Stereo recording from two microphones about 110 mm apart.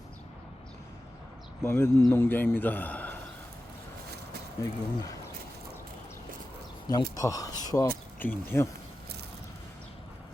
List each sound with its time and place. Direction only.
1.6 s a man's voice: 20° left (ahead or behind)
4.6 s speech: 35° left (ahead or behind)
6.8 s speech: 35° left (ahead or behind)
8.2 s speech: 20° left (ahead or behind)